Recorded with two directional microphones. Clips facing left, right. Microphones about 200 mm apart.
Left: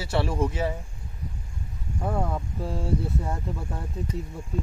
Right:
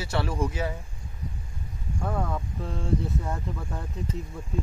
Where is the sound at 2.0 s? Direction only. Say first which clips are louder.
Left 2 dB; 15° left (ahead or behind).